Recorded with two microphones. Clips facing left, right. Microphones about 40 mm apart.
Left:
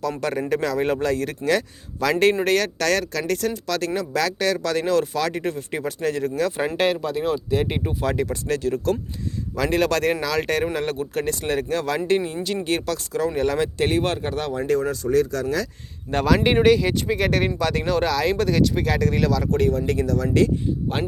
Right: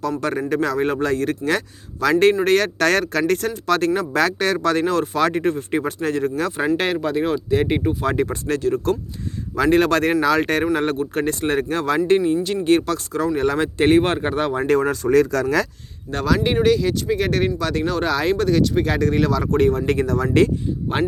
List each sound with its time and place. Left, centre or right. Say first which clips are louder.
0.2 s speech: right 2 dB; centre
2.7 s speech: right 4 dB; right; by 8.1 s centre
8.1 s speech: right 3 dB; right
8.4 s speech: right 1 dB; centre
13.8 s speech: right 9 dB; right
14.5 s speech: right 2 dB; right
15.1 s speech: right 4 dB; right
16.1 s speech: left 1 dB; centre
17.1 s speech: right 2 dB; centre
18.1 s speech: right 2 dB; centre
18.3 s speech: right 2 dB; centre; by 19.8 s right
19.8 s speech: right 2 dB; right
20.9 s speech: right 8 dB; centre